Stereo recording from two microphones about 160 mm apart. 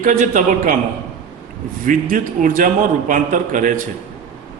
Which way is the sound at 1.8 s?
55° right (ahead or behind).